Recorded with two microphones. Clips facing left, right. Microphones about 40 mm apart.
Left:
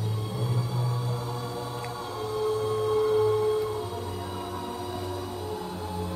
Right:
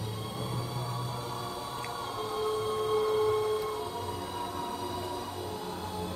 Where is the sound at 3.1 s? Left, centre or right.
Centre.